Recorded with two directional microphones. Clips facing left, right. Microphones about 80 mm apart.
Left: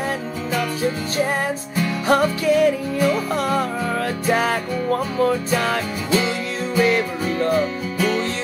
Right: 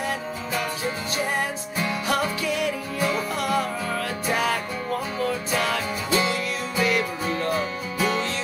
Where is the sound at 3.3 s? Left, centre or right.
Left.